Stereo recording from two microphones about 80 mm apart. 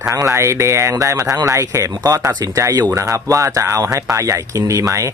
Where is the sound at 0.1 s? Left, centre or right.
Right.